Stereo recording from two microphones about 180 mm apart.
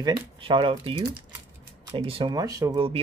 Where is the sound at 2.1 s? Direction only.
30° right (ahead or behind).